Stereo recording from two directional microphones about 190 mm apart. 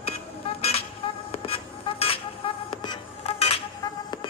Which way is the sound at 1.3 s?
30° left (ahead or behind).